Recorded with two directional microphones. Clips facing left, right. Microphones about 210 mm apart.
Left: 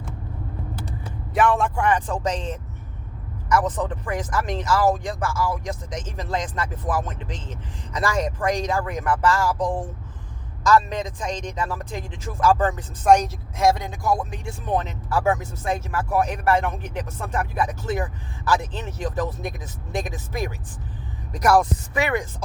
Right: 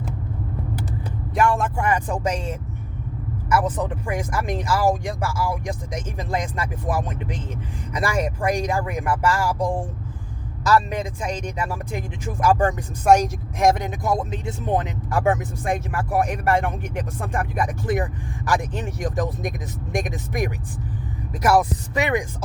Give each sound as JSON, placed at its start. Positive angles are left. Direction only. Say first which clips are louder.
{"t": 1.3, "sound": "speech", "louder": "left 1 dB", "side_deg": 0}
{"t": 21.3, "sound": "speech", "louder": "even", "side_deg": -5}
{"t": 21.9, "sound": "speech", "louder": "right 1 dB", "side_deg": -15}